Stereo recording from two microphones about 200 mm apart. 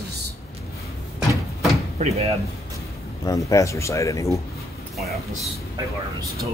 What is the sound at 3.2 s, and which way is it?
Speech, 15° left (ahead or behind).